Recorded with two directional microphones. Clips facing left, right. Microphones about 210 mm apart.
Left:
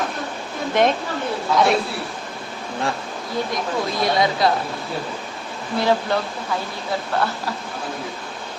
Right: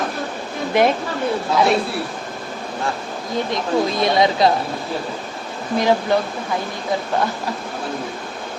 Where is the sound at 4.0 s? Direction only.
20° right (ahead or behind).